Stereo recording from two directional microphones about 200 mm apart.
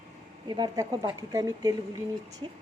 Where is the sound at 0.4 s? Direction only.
20° right (ahead or behind).